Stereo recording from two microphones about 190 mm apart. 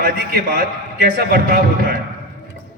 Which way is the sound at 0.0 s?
60° right (ahead or behind).